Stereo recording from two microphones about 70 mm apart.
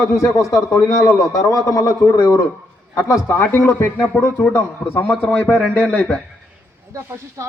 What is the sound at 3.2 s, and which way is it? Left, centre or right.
Speech, left.